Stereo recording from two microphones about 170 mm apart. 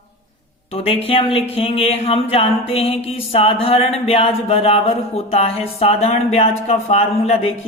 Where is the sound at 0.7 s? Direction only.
35° left (ahead or behind).